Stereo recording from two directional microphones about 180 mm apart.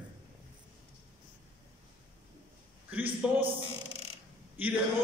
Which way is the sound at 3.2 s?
5° right (ahead or behind).